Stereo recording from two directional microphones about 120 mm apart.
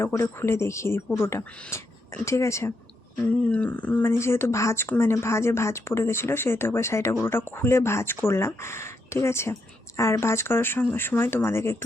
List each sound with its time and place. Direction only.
0.0 s speech: 25° left (ahead or behind)
3.5 s speech: 10° left (ahead or behind)